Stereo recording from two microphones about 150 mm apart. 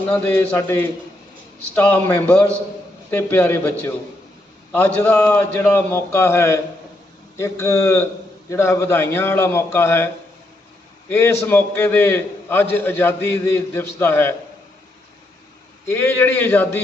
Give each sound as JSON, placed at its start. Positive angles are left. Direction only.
{"t": 0.1, "sound": "a man's voice", "side_deg": 10}
{"t": 11.1, "sound": "a man's voice", "side_deg": 15}
{"t": 15.9, "sound": "a man's voice", "side_deg": 15}